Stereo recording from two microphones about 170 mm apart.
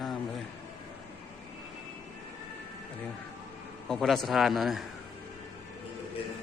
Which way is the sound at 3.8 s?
Centre (ahead or behind).